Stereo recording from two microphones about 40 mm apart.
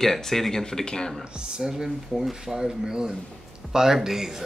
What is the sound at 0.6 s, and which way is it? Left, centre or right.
Speech, centre.